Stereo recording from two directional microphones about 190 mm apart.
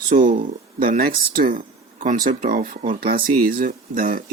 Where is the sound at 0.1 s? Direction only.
45° right (ahead or behind).